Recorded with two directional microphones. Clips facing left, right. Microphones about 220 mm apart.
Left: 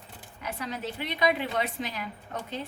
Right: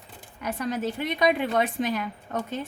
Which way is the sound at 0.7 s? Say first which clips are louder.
Right 7 dB; 50° right (ahead or behind).